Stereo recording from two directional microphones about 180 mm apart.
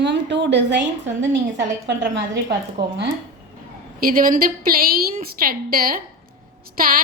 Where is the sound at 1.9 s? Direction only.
75° right (ahead or behind).